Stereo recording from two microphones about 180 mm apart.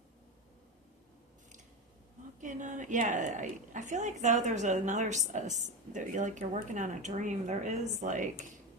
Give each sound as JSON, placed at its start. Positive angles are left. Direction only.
{"t": 2.4, "sound": "a woman's voice", "side_deg": -45}